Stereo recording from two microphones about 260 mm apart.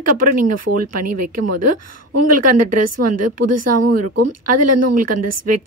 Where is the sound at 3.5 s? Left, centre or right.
Right.